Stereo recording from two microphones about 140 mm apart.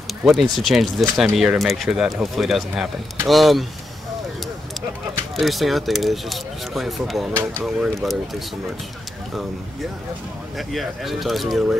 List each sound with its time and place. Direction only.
0.2 s speech: centre (ahead or behind)
5.3 s speech: centre (ahead or behind)
10.7 s speech: centre (ahead or behind)